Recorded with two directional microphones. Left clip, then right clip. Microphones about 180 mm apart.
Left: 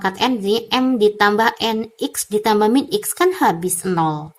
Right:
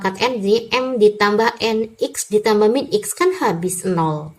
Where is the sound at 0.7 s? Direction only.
35° left (ahead or behind).